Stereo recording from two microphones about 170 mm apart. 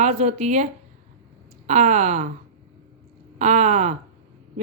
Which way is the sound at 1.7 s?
45° right (ahead or behind).